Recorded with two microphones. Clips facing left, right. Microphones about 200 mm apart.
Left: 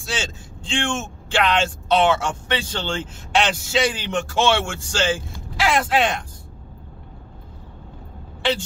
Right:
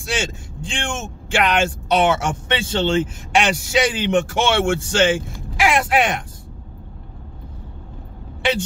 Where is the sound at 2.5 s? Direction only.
20° right (ahead or behind).